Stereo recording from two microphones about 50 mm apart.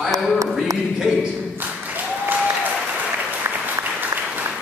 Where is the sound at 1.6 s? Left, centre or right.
Right.